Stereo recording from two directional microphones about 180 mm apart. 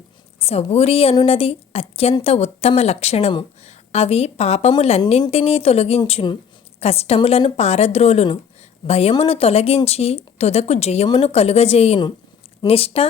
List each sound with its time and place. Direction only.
0.3 s speech: 35° left (ahead or behind)